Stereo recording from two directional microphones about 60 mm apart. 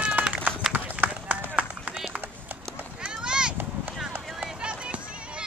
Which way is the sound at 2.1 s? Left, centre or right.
Right.